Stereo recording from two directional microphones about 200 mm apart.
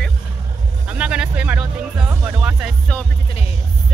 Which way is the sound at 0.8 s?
5° right (ahead or behind).